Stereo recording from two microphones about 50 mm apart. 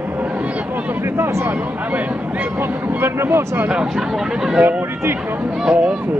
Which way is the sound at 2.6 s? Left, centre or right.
Right.